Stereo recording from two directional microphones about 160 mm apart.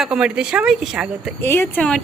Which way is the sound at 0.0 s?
5° right (ahead or behind).